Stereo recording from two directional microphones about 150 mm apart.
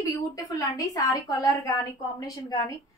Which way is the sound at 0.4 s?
25° left (ahead or behind).